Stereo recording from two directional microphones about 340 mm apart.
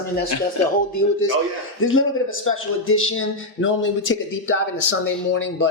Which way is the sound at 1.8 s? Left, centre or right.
Left.